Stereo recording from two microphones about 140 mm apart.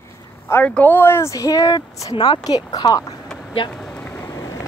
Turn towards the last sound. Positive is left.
turn(degrees=20)  # may be behind; listen again after turning